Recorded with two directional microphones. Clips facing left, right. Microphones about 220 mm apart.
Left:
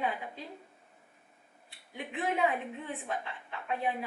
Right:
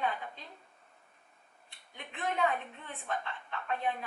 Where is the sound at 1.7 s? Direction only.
5° left (ahead or behind).